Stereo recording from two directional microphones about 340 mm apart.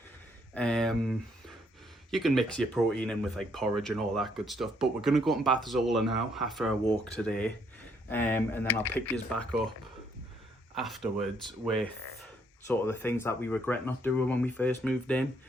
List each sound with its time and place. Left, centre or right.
0.5 s speech: centre
10.8 s speech: centre